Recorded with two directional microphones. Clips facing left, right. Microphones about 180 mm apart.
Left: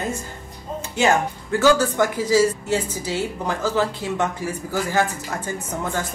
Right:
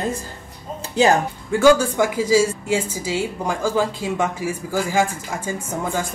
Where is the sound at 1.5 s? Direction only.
10° right (ahead or behind).